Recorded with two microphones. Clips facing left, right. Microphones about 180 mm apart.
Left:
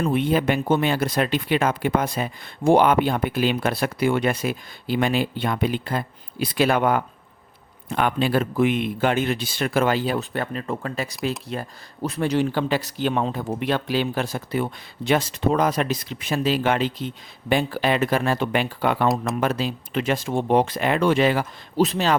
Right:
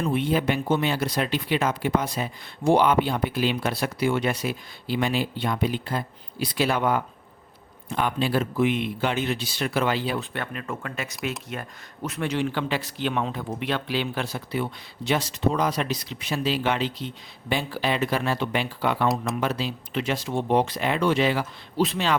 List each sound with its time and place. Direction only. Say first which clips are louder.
0.0 s speech: left 3 dB; 55° left (ahead or behind)
19.0 s speech: left 3 dB; centre (ahead or behind)
19.4 s speech: left 3 dB; 50° left (ahead or behind)